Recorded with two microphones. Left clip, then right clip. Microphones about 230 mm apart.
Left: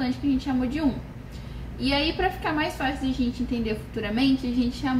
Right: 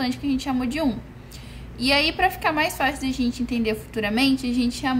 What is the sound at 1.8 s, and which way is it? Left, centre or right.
A woman's voice, right.